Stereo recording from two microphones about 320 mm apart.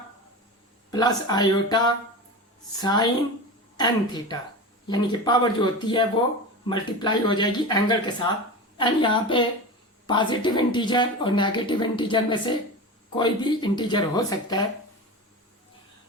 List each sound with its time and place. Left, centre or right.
0.9 s a woman's voice: centre